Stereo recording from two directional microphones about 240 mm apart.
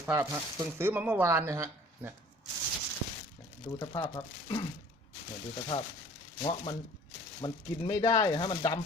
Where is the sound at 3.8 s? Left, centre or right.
Centre.